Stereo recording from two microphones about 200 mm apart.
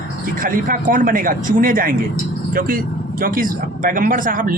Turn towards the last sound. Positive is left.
turn(degrees=-45)  # may be behind; listen again after turning